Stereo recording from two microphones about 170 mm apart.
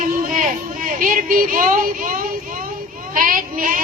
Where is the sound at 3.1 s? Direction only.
55° right (ahead or behind).